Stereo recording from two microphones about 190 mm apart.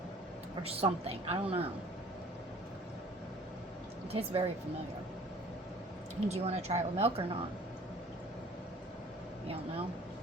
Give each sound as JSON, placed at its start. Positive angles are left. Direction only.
{"t": 0.6, "sound": "a woman's voice", "side_deg": -30}
{"t": 4.1, "sound": "a woman's voice", "side_deg": -30}
{"t": 6.1, "sound": "a woman's voice", "side_deg": -35}